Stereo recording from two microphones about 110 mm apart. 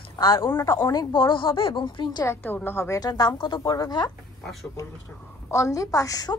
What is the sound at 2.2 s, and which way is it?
Speech, 20° left (ahead or behind).